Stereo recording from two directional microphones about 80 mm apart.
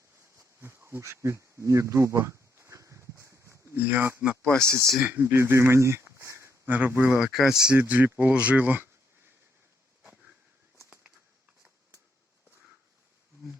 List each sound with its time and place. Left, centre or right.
0.2 s a sound: right
4.6 s speech: right
6.7 s speech: right
7.2 s speech: centre
7.7 s speech: centre